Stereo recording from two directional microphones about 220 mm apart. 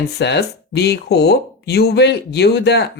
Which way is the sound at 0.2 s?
50° left (ahead or behind).